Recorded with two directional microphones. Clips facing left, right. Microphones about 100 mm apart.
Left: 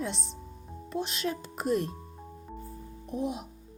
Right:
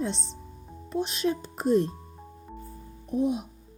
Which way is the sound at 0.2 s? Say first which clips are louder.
Even; 10° left (ahead or behind).